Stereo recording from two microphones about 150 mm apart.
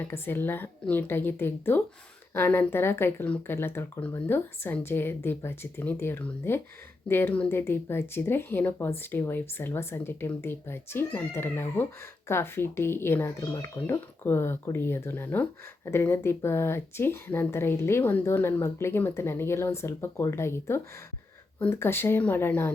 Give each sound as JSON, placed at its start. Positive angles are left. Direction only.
{"t": 0.0, "sound": "speech", "side_deg": 15}